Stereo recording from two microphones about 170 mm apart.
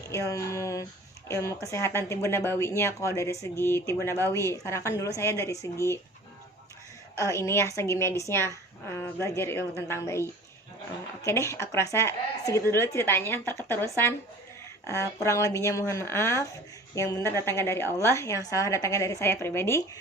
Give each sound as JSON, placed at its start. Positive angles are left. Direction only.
{"t": 0.1, "sound": "a woman's voice", "side_deg": 20}
{"t": 7.2, "sound": "a woman's voice", "side_deg": 15}